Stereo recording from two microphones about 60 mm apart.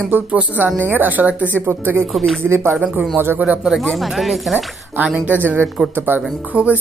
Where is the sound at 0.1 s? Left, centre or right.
Right.